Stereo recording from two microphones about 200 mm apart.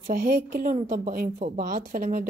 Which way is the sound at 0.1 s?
45° right (ahead or behind).